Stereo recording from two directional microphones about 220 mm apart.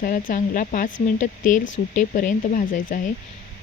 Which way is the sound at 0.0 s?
40° left (ahead or behind).